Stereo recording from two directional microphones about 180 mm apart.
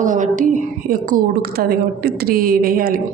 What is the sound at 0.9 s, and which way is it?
A woman's voice, 50° right (ahead or behind).